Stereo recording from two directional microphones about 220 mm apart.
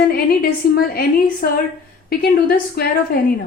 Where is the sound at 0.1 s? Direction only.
40° left (ahead or behind).